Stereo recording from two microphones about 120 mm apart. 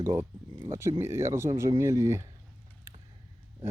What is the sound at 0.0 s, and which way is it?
Speech, 25° right (ahead or behind).